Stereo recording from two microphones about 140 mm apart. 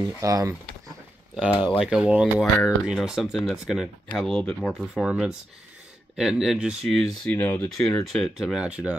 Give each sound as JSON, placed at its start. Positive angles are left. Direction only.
{"t": 0.0, "sound": "speech", "side_deg": -25}
{"t": 1.3, "sound": "speech", "side_deg": -5}
{"t": 7.2, "sound": "speech", "side_deg": 10}